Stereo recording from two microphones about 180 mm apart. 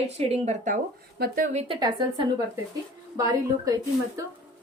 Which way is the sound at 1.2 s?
60° right (ahead or behind).